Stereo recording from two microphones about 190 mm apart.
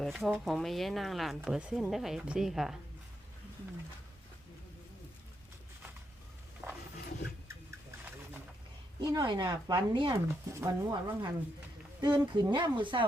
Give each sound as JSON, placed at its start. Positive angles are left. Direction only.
{"t": 0.0, "sound": "speech", "side_deg": 0}
{"t": 6.6, "sound": "roaring cats", "side_deg": -15}
{"t": 9.0, "sound": "speech", "side_deg": -20}